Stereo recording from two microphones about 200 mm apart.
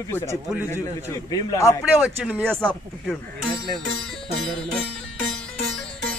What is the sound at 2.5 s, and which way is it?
Music, 5° left (ahead or behind).